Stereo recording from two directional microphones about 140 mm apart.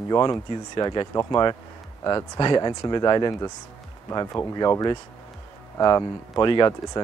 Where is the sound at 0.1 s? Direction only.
25° left (ahead or behind).